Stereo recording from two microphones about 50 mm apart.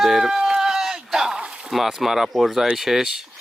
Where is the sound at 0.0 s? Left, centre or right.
Centre.